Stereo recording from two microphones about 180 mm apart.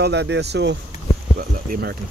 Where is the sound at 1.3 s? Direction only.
55° right (ahead or behind).